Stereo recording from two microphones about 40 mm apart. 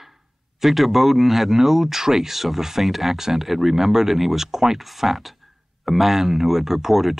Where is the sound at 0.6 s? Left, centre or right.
Centre.